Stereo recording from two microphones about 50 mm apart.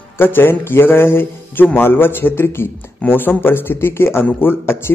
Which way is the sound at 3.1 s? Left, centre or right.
Left.